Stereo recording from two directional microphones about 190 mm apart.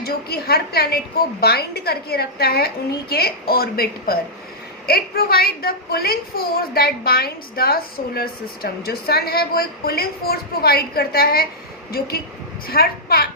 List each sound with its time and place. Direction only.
0.0 s a woman's voice: 55° left (ahead or behind)
12.6 s a woman's voice: 50° left (ahead or behind)